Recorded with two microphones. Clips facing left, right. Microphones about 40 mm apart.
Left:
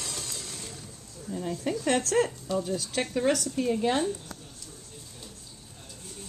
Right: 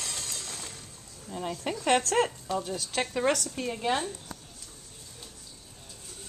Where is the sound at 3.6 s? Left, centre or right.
Centre.